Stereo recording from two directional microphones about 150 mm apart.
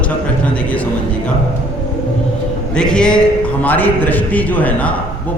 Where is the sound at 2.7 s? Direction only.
5° left (ahead or behind).